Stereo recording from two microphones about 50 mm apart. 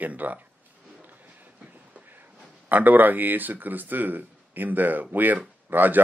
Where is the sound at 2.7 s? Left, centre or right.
Right.